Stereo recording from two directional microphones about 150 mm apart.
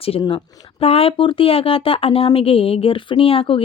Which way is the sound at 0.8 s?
40° left (ahead or behind).